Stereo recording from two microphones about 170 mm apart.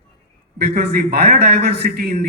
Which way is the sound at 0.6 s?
65° right (ahead or behind).